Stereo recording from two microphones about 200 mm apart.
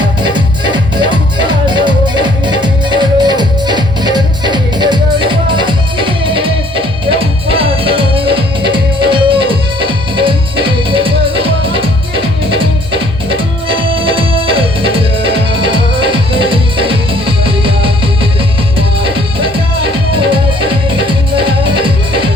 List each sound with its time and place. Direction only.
0.0 s music: 25° right (ahead or behind)
21.3 s music: 25° right (ahead or behind)